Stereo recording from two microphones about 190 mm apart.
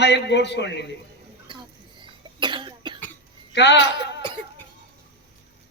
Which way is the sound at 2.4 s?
25° right (ahead or behind).